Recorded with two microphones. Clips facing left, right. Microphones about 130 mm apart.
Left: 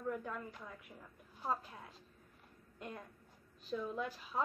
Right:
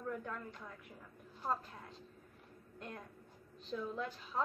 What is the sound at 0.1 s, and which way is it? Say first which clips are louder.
A woman's voice: left 1 dB; 5° left (ahead or behind).